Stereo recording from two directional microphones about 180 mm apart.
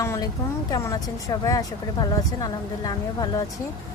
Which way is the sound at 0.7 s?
20° left (ahead or behind).